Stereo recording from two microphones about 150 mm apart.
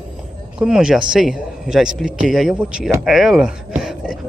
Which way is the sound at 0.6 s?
5° right (ahead or behind).